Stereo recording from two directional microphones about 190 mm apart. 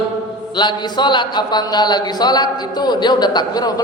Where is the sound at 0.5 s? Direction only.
25° left (ahead or behind).